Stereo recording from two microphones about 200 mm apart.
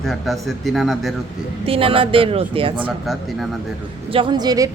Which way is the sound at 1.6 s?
25° right (ahead or behind).